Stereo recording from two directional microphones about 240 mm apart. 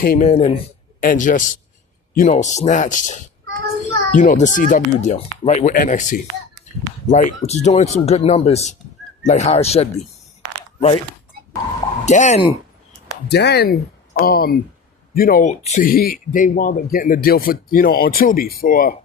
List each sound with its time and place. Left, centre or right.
0.0 s speech: left
12.0 s speech: left
13.2 s speech: left